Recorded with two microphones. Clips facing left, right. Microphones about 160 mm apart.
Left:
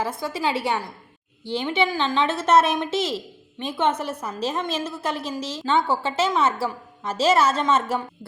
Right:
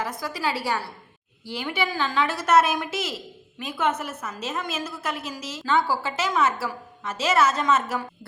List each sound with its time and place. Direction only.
0.0 s a woman's voice: 25° left (ahead or behind)